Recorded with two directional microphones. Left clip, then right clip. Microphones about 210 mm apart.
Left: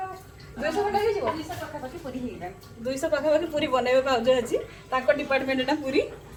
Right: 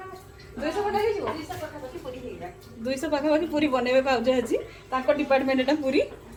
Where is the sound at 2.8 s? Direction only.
15° right (ahead or behind).